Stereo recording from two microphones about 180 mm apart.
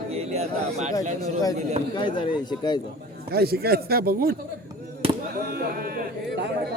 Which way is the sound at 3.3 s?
60° right (ahead or behind).